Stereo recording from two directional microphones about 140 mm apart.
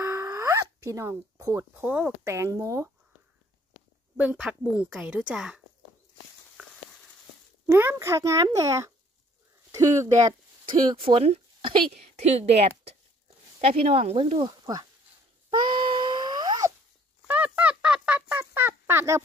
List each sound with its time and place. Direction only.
0.0 s a sound: 20° right (ahead or behind)
1.9 s a woman's voice: 10° right (ahead or behind)
2.2 s a child's voice: 20° right (ahead or behind)
4.2 s a woman's voice: 5° right (ahead or behind)
7.6 s a child's voice: 15° right (ahead or behind)
10.6 s a woman's voice: 35° right (ahead or behind)
14.4 s a child's voice: 25° right (ahead or behind)
15.7 s wail: 35° right (ahead or behind)
17.3 s fowl: 10° right (ahead or behind)